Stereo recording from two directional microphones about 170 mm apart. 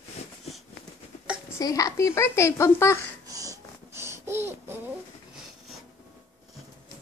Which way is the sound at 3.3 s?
20° right (ahead or behind).